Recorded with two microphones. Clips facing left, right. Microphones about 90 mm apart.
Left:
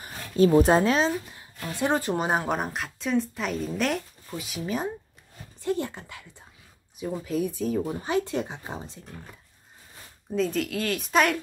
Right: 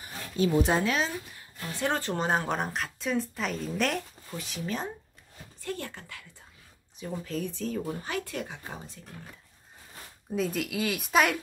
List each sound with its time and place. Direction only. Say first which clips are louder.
0.0 s speech: left 7 dB; 45° left (ahead or behind); by 9.0 s 20° left (ahead or behind)
10.3 s a woman's voice: left 3 dB; 5° right (ahead or behind)